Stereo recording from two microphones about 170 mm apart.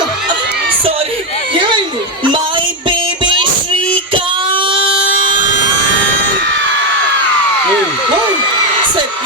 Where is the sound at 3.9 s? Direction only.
30° right (ahead or behind).